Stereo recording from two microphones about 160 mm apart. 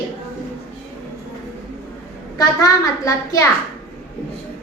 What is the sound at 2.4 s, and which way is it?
A child's voice, 20° left (ahead or behind).